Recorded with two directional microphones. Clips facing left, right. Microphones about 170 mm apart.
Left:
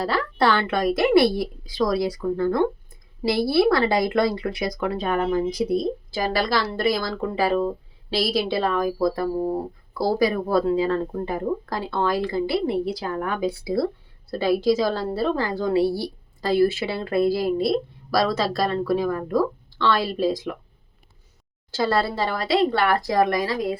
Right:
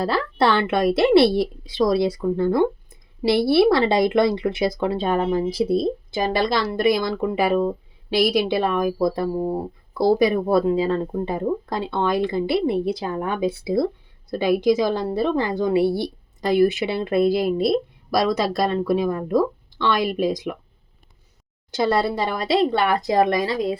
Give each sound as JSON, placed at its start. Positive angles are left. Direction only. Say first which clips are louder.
{"t": 0.0, "sound": "a woman's voice", "louder": "right 1 dB", "side_deg": -25}
{"t": 9.4, "sound": "speech", "louder": "even", "side_deg": 0}
{"t": 10.0, "sound": "a woman's voice", "louder": "right 4 dB", "side_deg": -20}
{"t": 21.7, "sound": "a woman's voice", "louder": "right 2 dB", "side_deg": -20}